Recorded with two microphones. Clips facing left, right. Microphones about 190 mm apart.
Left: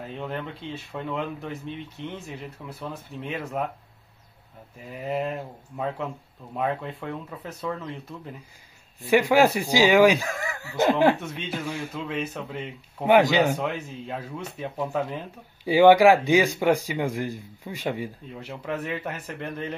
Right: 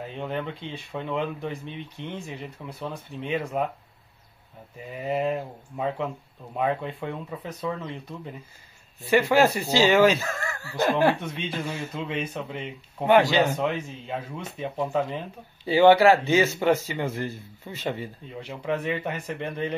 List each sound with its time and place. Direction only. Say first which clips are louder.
0.2 s speech: right 3 dB; centre (ahead or behind)
5.0 s speech: right 2 dB; centre (ahead or behind)
7.4 s speech: even; 5° left (ahead or behind)
11.3 s speech: even; centre (ahead or behind)
13.1 s speech: left 1 dB; 15° left (ahead or behind)
15.6 s speech: left 1 dB; 15° left (ahead or behind)